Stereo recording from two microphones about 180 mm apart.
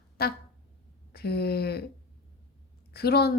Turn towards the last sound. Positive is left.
turn(degrees=60)  # may be behind; listen again after turning